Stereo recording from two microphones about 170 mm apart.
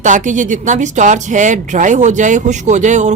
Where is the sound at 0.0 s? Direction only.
45° right (ahead or behind).